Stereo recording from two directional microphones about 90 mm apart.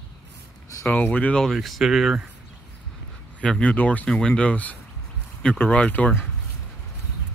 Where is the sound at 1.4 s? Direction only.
Centre (ahead or behind).